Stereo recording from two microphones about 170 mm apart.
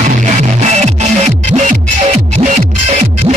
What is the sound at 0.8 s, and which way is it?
Music, 45° right (ahead or behind).